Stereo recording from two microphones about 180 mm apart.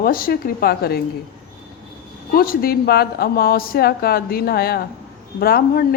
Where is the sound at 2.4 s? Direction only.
55° left (ahead or behind).